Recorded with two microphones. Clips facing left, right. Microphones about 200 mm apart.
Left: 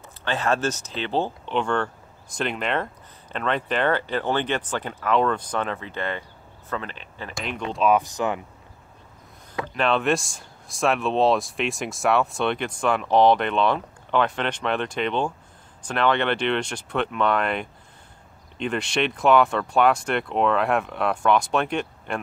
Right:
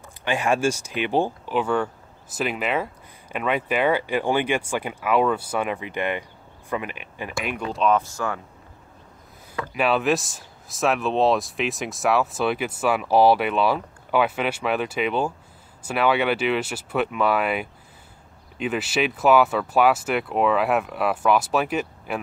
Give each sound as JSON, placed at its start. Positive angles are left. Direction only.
{"t": 0.2, "sound": "speech", "side_deg": -15}
{"t": 7.7, "sound": "speech", "side_deg": 5}
{"t": 8.0, "sound": "speech", "side_deg": 20}
{"t": 9.8, "sound": "speech", "side_deg": -5}